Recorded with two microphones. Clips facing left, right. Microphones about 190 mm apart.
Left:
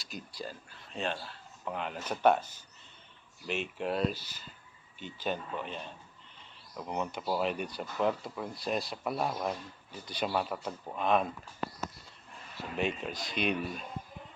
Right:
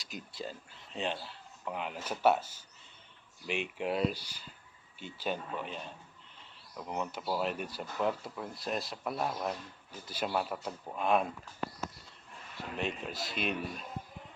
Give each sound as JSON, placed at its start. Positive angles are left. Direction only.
{"t": 0.0, "sound": "speech", "side_deg": -20}
{"t": 1.6, "sound": "speech", "side_deg": -5}
{"t": 12.7, "sound": "speech", "side_deg": 0}